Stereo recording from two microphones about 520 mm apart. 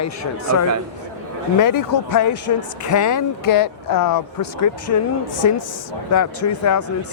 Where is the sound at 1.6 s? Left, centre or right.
Left.